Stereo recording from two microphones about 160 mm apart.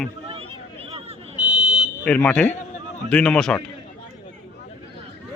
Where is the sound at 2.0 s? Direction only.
5° left (ahead or behind).